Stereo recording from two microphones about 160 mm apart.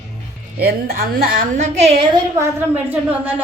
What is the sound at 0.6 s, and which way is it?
A woman's voice, 70° right (ahead or behind).